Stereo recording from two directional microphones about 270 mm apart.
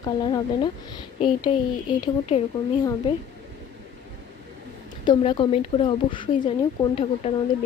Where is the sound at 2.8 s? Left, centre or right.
Centre.